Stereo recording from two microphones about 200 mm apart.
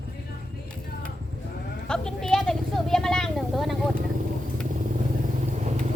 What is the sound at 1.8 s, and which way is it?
Vehicle, 5° left (ahead or behind).